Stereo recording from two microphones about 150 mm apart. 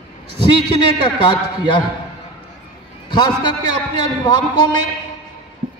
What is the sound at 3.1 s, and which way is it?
A man's voice, 30° left (ahead or behind).